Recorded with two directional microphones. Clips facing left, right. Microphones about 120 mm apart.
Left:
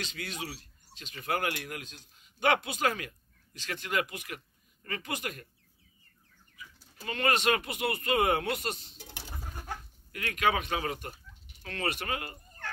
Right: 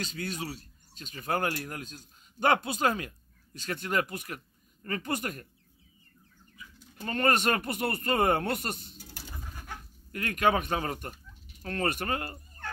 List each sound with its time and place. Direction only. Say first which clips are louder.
0.0 s speech: right 3 dB; 40° right (ahead or behind)
7.1 s a man's voice: right 1 dB; 45° right (ahead or behind)
8.9 s bird: left 1 dB; 60° left (ahead or behind)
10.1 s a man's voice: right 3 dB; 45° right (ahead or behind)